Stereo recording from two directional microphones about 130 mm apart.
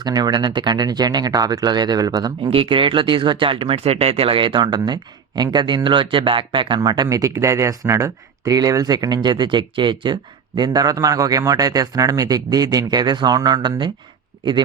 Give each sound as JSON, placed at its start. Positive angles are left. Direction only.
{"t": 0.0, "sound": "speech", "side_deg": -30}
{"t": 2.5, "sound": "a man's voice", "side_deg": -45}